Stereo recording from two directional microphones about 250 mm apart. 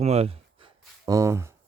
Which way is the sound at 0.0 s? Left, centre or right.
Right.